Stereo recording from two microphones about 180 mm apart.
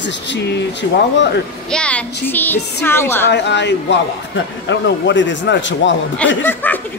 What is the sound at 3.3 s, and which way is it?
Speech, 75° left (ahead or behind).